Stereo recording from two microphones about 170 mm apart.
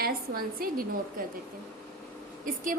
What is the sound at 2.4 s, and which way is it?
Speech, 55° right (ahead or behind).